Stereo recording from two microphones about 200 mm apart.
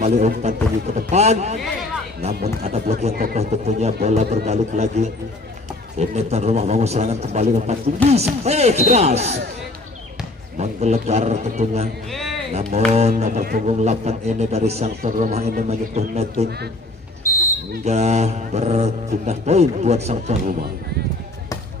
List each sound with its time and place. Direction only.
0.0 s a man's voice: 35° right (ahead or behind)
3.1 s speech: 50° right (ahead or behind)
3.3 s a man's voice: 35° right (ahead or behind)
10.6 s a man's voice: 35° right (ahead or behind)
12.1 s music: centre (ahead or behind)
12.5 s a man's voice: 35° right (ahead or behind)
13.2 s a man's voice: 45° right (ahead or behind)
17.8 s a man's voice: 35° right (ahead or behind)